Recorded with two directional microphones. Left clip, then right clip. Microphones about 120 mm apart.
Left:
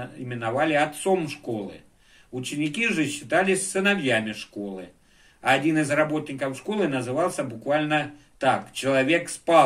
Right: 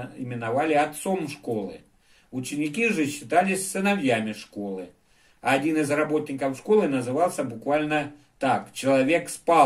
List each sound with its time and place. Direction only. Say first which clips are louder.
0.3 s speech: even; 35° right (ahead or behind)